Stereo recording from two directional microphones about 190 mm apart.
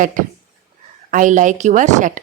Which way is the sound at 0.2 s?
45° right (ahead or behind).